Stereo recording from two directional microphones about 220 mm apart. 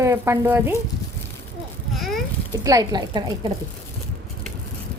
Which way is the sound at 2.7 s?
15° right (ahead or behind).